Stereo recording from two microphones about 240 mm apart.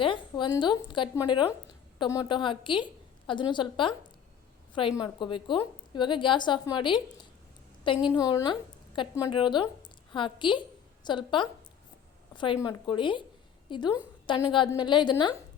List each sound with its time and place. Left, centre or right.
0.0 s a woman's voice: centre
8.1 s a woman's voice: centre